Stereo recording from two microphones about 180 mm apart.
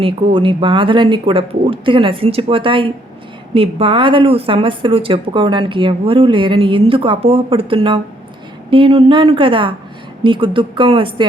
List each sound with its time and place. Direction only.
0.0 s speech: 30° right (ahead or behind)